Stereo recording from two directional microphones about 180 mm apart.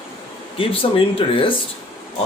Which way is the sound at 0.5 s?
30° left (ahead or behind).